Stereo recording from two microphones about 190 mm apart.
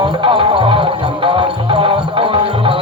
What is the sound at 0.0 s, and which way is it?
Music, 25° right (ahead or behind).